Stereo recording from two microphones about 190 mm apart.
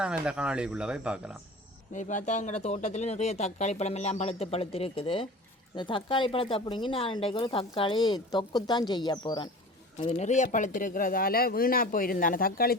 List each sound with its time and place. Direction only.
0.0 s speech: 5° right (ahead or behind)
1.9 s speech: 40° left (ahead or behind); by 9.5 s 20° left (ahead or behind)
10.1 s speech: 40° left (ahead or behind)